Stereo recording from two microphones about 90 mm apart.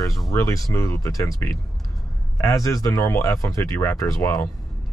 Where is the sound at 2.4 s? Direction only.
35° left (ahead or behind).